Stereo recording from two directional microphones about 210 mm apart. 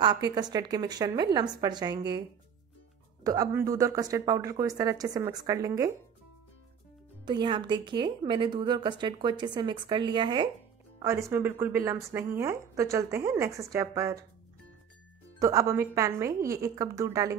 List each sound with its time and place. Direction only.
0.0 s a woman's voice: 20° right (ahead or behind)
3.3 s a woman's voice: 15° right (ahead or behind)
7.2 s a woman's voice: 20° right (ahead or behind)
15.3 s a woman's voice: 15° right (ahead or behind)